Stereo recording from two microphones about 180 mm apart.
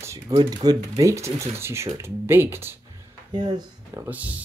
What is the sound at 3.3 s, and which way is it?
Speech, 25° right (ahead or behind).